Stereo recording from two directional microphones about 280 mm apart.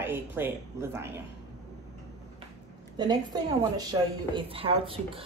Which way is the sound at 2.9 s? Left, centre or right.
Centre.